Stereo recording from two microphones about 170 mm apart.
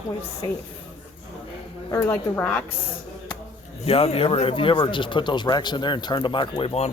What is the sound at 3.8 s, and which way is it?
Speech, 35° left (ahead or behind).